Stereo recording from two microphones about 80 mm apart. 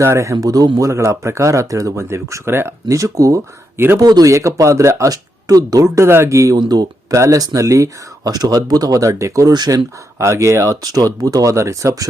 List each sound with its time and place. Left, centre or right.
0.0 s speech: right
0.3 s speech: right
2.9 s speech: right
3.8 s speech: right
4.0 s speech: right
4.3 s speech: right
6.6 s speech: right
9.5 s speech: right